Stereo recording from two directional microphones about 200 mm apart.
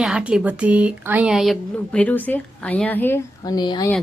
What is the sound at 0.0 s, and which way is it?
Speech, 5° right (ahead or behind).